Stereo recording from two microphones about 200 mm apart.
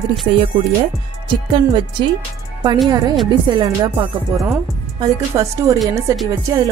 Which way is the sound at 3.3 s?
20° right (ahead or behind).